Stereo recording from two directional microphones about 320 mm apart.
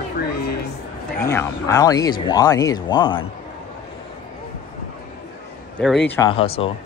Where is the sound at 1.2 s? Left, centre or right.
Centre.